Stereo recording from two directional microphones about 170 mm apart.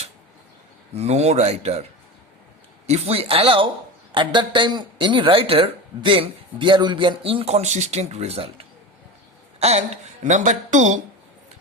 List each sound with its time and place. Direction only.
0.9 s a woman's voice: 40° right (ahead or behind)